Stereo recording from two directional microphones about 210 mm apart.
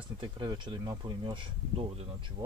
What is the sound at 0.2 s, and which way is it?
Speech, 20° right (ahead or behind).